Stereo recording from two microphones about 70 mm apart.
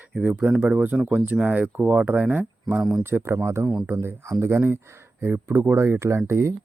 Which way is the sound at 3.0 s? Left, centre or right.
Right.